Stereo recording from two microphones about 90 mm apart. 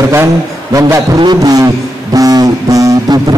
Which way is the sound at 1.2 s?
50° right (ahead or behind).